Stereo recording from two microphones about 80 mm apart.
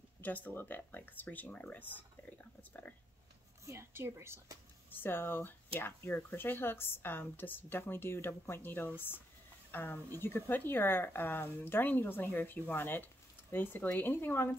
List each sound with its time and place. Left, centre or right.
0.2 s speech: left
3.6 s a woman's voice: right
4.9 s speech: left